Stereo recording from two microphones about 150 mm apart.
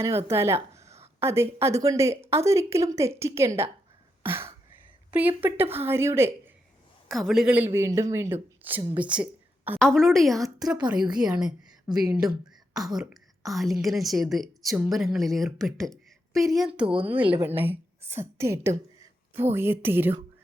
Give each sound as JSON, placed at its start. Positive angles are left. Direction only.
{"t": 0.3, "sound": "a woman's voice", "side_deg": -15}
{"t": 4.2, "sound": "throat clearing", "side_deg": -15}
{"t": 5.4, "sound": "a woman's voice", "side_deg": -15}
{"t": 7.1, "sound": "a woman's voice", "side_deg": 0}
{"t": 9.8, "sound": "a woman's voice", "side_deg": 5}
{"t": 10.7, "sound": "a woman's voice", "side_deg": -30}
{"t": 11.3, "sound": "a woman's voice", "side_deg": -5}
{"t": 11.9, "sound": "a woman's voice", "side_deg": -25}
{"t": 12.7, "sound": "a woman's voice", "side_deg": -5}